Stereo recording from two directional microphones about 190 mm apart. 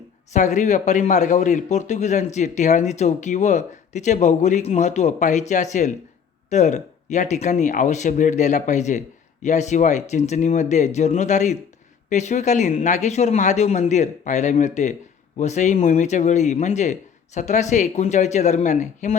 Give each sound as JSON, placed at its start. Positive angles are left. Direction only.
{"t": 0.3, "sound": "a man's voice", "side_deg": 40}